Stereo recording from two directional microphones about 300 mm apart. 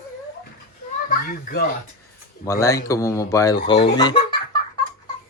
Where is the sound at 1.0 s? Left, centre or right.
Left.